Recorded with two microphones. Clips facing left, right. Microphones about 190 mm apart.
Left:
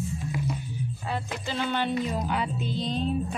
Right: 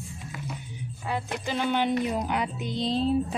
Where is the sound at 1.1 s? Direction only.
15° right (ahead or behind).